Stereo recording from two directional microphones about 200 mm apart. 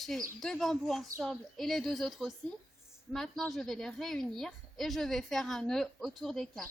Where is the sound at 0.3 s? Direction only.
Centre (ahead or behind).